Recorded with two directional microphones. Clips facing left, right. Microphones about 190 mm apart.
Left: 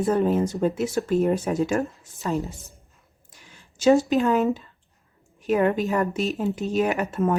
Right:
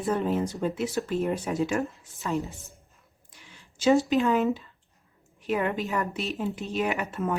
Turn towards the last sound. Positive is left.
turn(degrees=45)  # may be behind; listen again after turning